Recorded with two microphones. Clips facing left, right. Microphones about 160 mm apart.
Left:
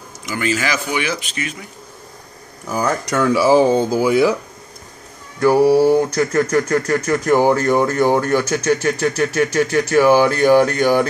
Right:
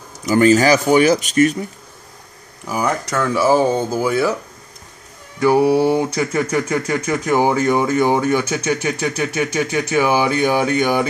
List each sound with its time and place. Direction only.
0.2 s speech: 40° right (ahead or behind)
2.6 s speech: 10° right (ahead or behind)
3.1 s speech: 15° left (ahead or behind)
5.4 s speech: 15° right (ahead or behind)